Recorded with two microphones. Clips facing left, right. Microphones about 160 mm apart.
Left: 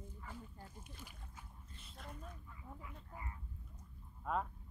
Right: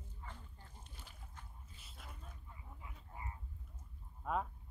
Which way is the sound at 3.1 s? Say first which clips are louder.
Right 2 dB; 25° right (ahead or behind).